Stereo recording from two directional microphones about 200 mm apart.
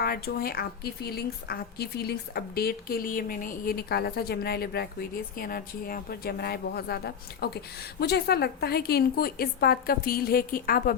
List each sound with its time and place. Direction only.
0.0 s speech: 50° left (ahead or behind)